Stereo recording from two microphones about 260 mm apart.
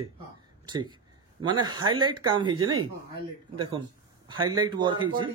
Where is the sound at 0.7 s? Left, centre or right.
Centre.